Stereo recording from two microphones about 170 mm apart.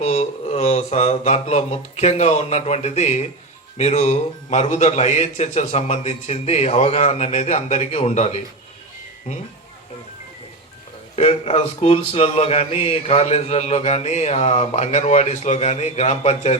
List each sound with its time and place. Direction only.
0.0 s a man's voice: 35° left (ahead or behind)
11.2 s a man's voice: 35° left (ahead or behind)